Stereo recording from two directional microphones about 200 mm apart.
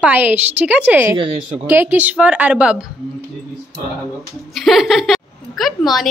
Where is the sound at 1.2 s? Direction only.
25° right (ahead or behind).